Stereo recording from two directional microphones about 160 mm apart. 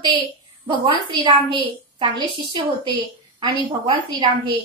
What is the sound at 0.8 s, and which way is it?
A woman's voice, 30° right (ahead or behind).